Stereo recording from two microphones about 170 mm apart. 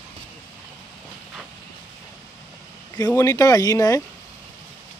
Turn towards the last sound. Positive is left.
turn(degrees=20)  # may be behind; listen again after turning